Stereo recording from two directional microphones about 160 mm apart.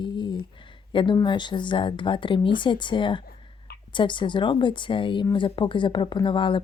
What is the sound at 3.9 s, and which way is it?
Speech, 30° left (ahead or behind).